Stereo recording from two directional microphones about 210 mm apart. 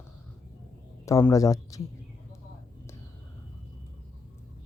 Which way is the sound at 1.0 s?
15° left (ahead or behind).